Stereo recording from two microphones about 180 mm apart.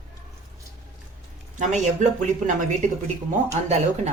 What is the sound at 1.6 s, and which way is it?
Speech, 45° right (ahead or behind).